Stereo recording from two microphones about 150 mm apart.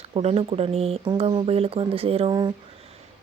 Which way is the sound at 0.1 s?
40° right (ahead or behind).